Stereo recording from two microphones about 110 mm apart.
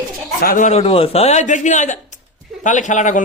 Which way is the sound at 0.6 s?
70° left (ahead or behind).